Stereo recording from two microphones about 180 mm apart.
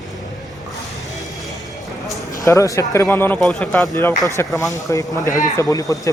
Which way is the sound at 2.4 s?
15° left (ahead or behind).